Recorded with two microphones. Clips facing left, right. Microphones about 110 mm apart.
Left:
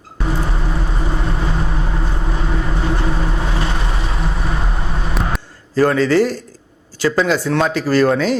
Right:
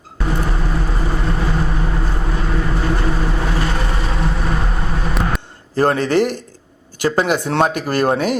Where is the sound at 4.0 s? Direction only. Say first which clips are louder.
Right 2 dB; centre (ahead or behind).